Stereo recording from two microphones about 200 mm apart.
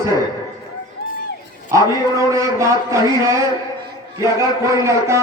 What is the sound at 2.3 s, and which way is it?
Speech, 15° right (ahead or behind).